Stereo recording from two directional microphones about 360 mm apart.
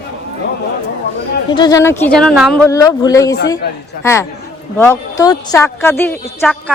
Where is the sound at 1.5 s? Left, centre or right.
Centre.